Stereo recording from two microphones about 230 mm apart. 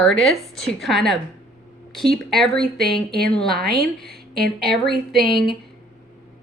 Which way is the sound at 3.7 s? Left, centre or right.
Right.